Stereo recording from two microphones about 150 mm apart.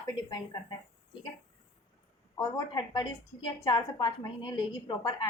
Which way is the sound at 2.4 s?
30° left (ahead or behind).